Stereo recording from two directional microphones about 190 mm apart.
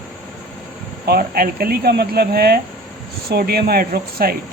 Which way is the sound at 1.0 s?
55° right (ahead or behind).